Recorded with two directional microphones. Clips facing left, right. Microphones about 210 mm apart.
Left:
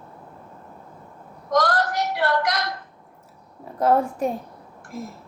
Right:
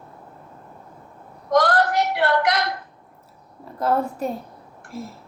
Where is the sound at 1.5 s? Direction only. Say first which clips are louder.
Right 3 dB; 60° right (ahead or behind).